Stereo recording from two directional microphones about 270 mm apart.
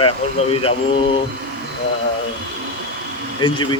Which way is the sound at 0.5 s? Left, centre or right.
Centre.